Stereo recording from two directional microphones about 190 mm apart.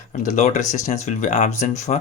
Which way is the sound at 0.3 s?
35° left (ahead or behind).